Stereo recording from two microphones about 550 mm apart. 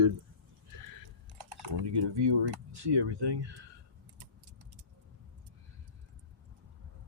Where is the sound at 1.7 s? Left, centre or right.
Right.